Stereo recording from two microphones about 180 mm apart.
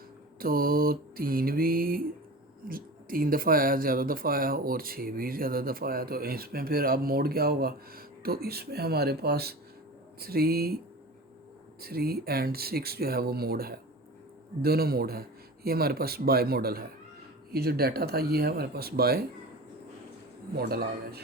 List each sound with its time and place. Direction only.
0.3 s speech: 55° right (ahead or behind)
11.8 s speech: 60° right (ahead or behind)
20.6 s speech: 60° right (ahead or behind)